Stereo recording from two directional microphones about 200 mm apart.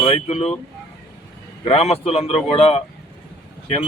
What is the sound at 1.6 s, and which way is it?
Speech, 30° left (ahead or behind).